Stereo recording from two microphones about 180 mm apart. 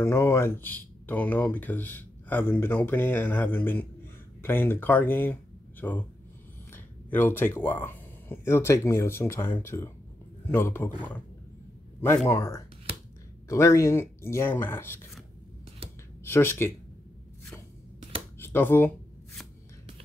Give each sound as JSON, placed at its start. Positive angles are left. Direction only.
{"t": 0.0, "sound": "speech", "side_deg": 15}
{"t": 12.3, "sound": "speech", "side_deg": 15}
{"t": 16.3, "sound": "speech", "side_deg": 15}
{"t": 18.4, "sound": "speech", "side_deg": 10}